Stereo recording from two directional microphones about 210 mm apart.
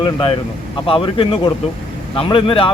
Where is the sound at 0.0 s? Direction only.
25° left (ahead or behind).